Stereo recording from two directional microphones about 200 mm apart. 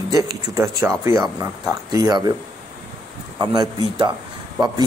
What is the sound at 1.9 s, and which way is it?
Speech, 20° right (ahead or behind).